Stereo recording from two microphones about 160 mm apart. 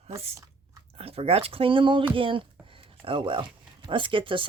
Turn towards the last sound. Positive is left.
turn(degrees=-30)  # may be behind; listen again after turning